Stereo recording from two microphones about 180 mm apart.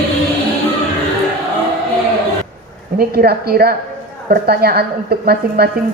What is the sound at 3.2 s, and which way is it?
A woman's voice, 60° right (ahead or behind).